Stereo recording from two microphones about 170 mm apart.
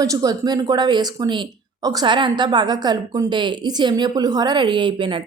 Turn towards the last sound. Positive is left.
turn(degrees=-30)  # may be behind; listen again after turning